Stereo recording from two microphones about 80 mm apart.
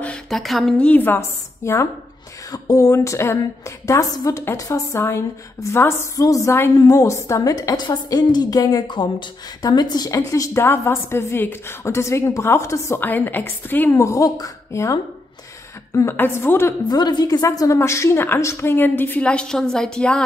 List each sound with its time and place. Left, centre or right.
0.3 s speech: centre
0.7 s a woman's voice: centre
1.6 s speech: left
2.5 s a woman's voice: left
4.9 s a woman's voice: left
6.1 s a woman's voice: left
10.1 s a woman's voice: left
10.8 s a woman's voice: left
13.0 s a woman's voice: left
13.8 s a woman's voice: left
16.2 s a woman's voice: left
16.9 s a woman's voice: left
17.5 s a woman's voice: left
19.2 s a woman's voice: centre